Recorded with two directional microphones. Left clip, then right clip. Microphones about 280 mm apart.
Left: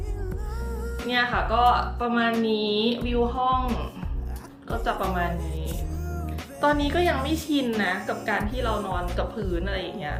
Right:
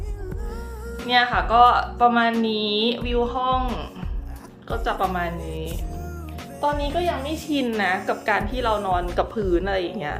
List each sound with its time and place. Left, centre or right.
1.0 s a woman's voice: centre
2.5 s music: centre
4.7 s a woman's voice: centre
6.6 s a woman's voice: centre
7.8 s music: centre